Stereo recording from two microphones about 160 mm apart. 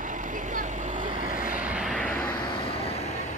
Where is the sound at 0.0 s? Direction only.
55° right (ahead or behind).